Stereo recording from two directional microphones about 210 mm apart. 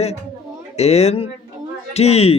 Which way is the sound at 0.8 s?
30° left (ahead or behind).